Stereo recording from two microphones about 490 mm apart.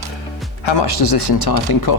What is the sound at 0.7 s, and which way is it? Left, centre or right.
Speech, left.